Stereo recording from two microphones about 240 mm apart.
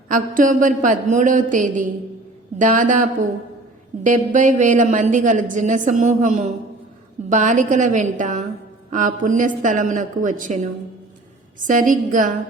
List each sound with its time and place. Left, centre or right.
0.1 s a woman's voice: right